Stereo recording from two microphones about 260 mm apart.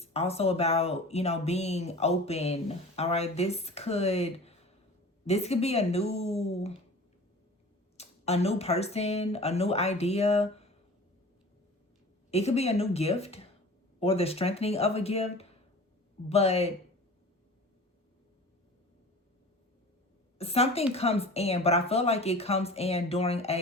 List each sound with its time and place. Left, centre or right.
0.0 s speech: left
7.9 s speech: left
12.3 s speech: left
20.4 s speech: left